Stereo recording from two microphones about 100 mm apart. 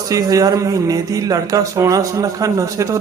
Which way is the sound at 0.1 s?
35° right (ahead or behind).